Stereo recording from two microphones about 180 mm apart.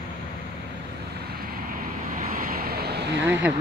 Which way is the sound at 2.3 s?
50° right (ahead or behind).